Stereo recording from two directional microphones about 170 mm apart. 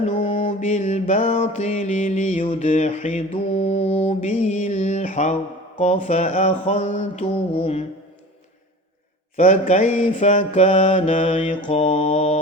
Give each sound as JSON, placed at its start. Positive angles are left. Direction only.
{"t": 0.0, "sound": "mantra", "side_deg": 50}
{"t": 0.3, "sound": "mantra", "side_deg": 30}
{"t": 9.3, "sound": "mantra", "side_deg": 45}